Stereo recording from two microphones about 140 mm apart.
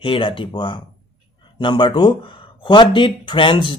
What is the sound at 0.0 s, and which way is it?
Speech, 40° left (ahead or behind).